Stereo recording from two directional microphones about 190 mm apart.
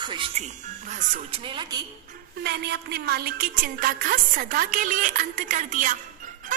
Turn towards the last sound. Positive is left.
turn(degrees=-45)  # may be behind; listen again after turning